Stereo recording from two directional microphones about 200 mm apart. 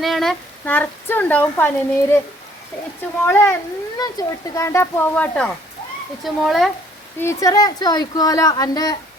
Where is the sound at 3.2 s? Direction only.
10° left (ahead or behind).